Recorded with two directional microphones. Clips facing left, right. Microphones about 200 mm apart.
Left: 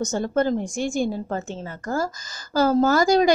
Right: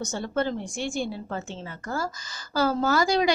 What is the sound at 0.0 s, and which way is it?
Speech, 45° left (ahead or behind).